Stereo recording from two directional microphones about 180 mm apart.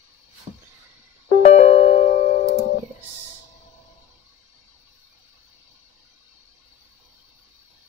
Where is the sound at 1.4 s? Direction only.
40° left (ahead or behind).